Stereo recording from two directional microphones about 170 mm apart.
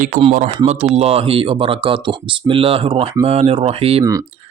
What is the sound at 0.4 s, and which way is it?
Speech, 35° right (ahead or behind).